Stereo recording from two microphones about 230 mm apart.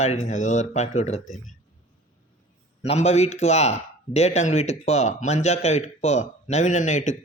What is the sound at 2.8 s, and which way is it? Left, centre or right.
Speech, left.